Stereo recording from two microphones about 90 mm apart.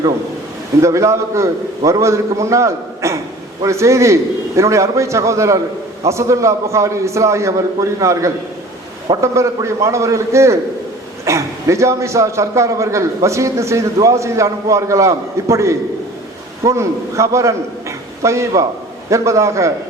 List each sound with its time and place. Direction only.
0.8 s a man's voice: 35° right (ahead or behind)